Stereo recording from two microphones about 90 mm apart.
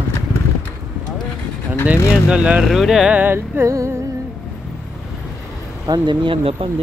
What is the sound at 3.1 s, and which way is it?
Speech, 20° right (ahead or behind).